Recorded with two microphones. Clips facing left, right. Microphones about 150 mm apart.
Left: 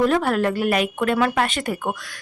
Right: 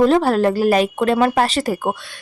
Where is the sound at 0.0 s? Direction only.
30° right (ahead or behind).